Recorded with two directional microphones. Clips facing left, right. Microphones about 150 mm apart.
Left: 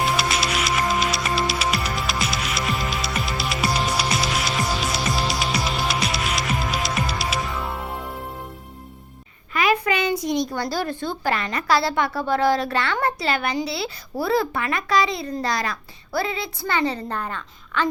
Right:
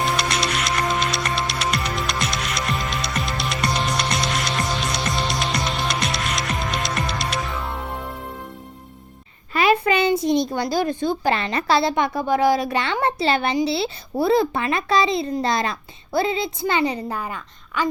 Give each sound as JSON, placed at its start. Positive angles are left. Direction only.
{"t": 0.0, "sound": "music", "side_deg": 0}
{"t": 9.5, "sound": "a woman's voice", "side_deg": -30}